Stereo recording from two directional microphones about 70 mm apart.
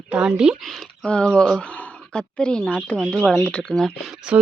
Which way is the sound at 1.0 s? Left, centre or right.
Centre.